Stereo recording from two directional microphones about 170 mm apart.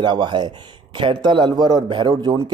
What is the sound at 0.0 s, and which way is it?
A man's voice, 25° right (ahead or behind).